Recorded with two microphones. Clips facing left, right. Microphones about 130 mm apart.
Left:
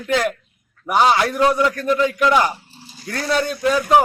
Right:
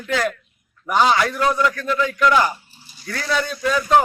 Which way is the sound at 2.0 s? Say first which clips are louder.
Even; 25° left (ahead or behind).